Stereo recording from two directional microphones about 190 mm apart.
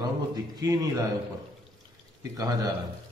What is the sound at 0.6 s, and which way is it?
Speech, 20° right (ahead or behind).